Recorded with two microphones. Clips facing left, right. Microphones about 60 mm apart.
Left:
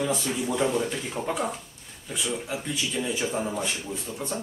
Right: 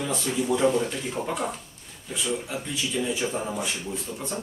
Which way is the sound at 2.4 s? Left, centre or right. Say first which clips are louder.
Even; centre.